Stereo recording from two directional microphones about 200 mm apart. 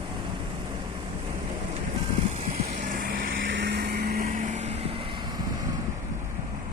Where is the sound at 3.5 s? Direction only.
60° right (ahead or behind); by 5.2 s 30° right (ahead or behind).